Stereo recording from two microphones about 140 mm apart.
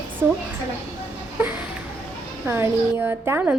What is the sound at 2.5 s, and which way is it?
A woman's voice, 15° right (ahead or behind).